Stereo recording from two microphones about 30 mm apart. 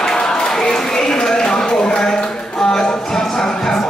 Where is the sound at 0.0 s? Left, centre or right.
Left.